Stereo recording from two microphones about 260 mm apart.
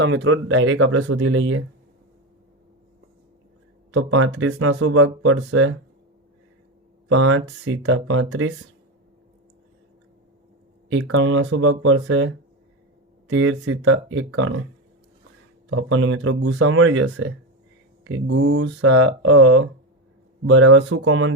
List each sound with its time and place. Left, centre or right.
0.0 s speech: right
3.9 s speech: right
7.1 s speech: right
10.8 s speech: right
15.7 s speech: right